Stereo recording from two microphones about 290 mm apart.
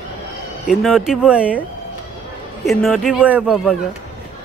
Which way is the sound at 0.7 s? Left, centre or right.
Centre.